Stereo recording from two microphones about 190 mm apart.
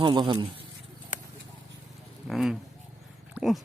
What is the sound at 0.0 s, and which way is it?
Speech, 25° right (ahead or behind).